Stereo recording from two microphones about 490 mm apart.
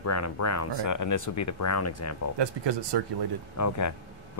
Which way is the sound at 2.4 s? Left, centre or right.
Right.